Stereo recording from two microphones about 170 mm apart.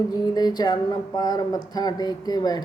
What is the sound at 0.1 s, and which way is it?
Speech, 25° left (ahead or behind).